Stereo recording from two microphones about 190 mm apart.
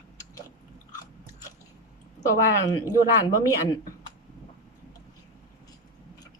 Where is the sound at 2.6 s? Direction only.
20° left (ahead or behind).